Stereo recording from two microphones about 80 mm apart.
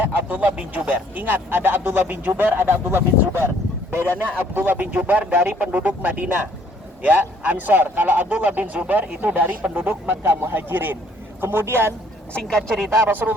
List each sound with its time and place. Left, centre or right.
0.0 s speech: right
12.3 s speech: centre
13.1 s speech: right